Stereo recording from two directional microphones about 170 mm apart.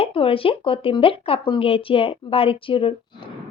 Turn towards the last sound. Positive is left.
turn(degrees=30)  # may be behind; listen again after turning